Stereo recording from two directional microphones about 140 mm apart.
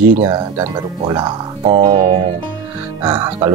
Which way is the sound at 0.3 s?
35° right (ahead or behind).